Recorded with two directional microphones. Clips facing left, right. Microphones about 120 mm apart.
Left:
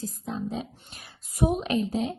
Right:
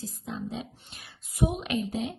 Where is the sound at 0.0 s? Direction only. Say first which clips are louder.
Left 4 dB; 40° left (ahead or behind).